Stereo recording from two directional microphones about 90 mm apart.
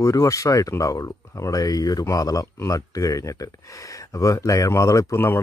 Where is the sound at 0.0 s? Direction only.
35° left (ahead or behind).